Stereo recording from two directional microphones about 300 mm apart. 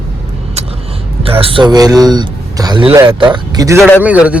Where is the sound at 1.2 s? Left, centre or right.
Centre.